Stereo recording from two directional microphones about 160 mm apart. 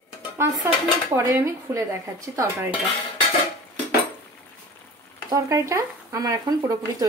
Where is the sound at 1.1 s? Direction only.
20° right (ahead or behind).